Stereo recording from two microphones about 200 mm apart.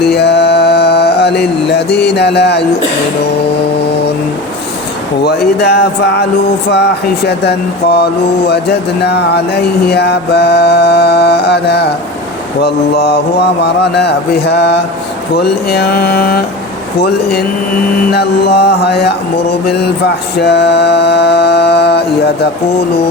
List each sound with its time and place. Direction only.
0.0 s music: 55° left (ahead or behind)
5.2 s a sound: 55° left (ahead or behind)
20.4 s mantra: 55° left (ahead or behind)